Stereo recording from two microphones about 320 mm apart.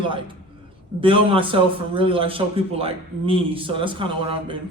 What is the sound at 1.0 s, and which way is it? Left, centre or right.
A man's voice, centre.